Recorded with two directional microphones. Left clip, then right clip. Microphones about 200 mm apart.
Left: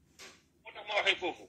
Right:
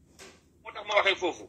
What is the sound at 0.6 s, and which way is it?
Telephone, 5° left (ahead or behind).